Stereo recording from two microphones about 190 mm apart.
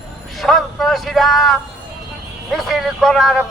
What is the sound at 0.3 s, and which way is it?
A man's voice, centre (ahead or behind).